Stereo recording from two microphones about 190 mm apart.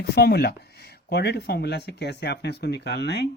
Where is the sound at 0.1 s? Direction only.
60° left (ahead or behind).